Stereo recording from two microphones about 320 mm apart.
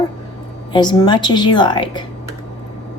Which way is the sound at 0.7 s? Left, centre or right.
Centre.